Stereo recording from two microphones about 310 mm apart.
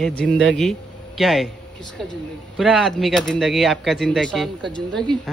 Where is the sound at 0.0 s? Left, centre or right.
Centre.